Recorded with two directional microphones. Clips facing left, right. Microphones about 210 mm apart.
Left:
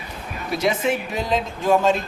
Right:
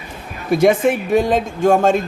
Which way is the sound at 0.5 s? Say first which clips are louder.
Right 8 dB; 55° right (ahead or behind).